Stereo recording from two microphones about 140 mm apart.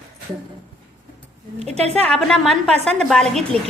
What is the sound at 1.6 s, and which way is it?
Speech, 50° right (ahead or behind).